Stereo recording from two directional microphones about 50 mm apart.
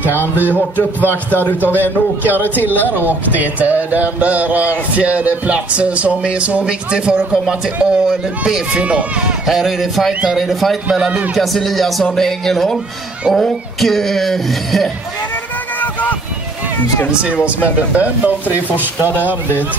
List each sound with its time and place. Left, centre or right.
0.0 s a sound: left
0.6 s a man's voice: left
1.7 s speech: right; by 7.2 s centre
7.4 s speech: centre
8.7 s speech: right
9.5 s speech: centre
15.8 s a sound: left
17.1 s speech: right